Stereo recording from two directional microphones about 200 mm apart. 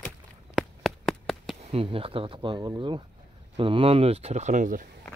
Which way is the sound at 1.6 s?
30° right (ahead or behind).